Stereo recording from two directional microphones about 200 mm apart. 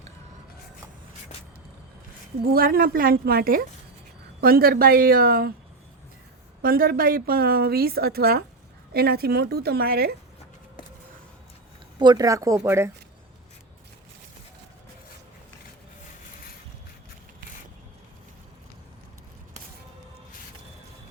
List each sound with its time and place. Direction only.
2.5 s a woman's voice: 45° right (ahead or behind)
6.6 s a woman's voice: 45° right (ahead or behind)
11.9 s speech: 20° right (ahead or behind)